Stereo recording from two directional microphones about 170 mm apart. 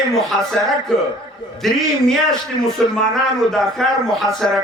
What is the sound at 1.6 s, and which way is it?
Speech, centre (ahead or behind).